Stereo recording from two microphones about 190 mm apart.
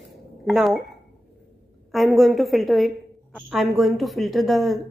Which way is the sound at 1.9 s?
Centre (ahead or behind).